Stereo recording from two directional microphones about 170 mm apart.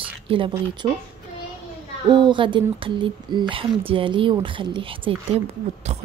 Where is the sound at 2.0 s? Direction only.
25° right (ahead or behind).